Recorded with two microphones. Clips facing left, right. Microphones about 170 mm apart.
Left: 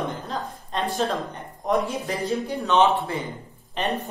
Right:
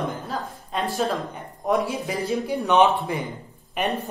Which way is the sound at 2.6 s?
15° right (ahead or behind).